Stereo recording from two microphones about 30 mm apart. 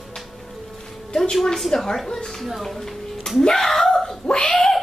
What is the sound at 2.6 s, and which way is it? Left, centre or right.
Speech, centre.